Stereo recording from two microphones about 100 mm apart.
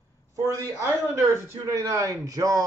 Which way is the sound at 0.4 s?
30° right (ahead or behind).